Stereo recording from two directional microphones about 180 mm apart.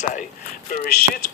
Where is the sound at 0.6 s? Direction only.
55° left (ahead or behind).